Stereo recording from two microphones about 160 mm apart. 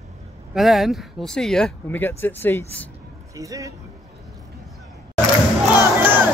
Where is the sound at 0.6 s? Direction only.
Centre (ahead or behind).